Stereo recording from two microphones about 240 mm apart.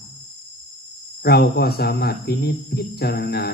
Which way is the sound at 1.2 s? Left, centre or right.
Left.